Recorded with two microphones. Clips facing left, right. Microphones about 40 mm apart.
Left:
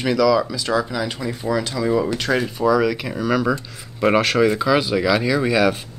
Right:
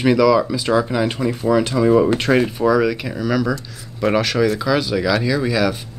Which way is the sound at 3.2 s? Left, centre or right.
Centre.